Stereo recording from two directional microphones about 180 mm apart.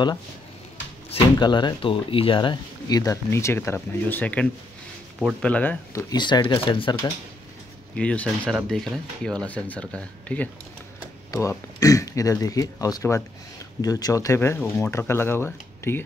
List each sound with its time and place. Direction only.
1.1 s speech: 25° left (ahead or behind); by 6.0 s 10° left (ahead or behind)
6.0 s speech: 25° left (ahead or behind)
7.9 s speech: 5° left (ahead or behind)
11.3 s speech: 20° left (ahead or behind)